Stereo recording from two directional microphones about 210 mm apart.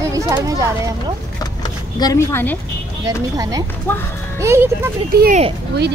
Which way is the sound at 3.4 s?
15° right (ahead or behind).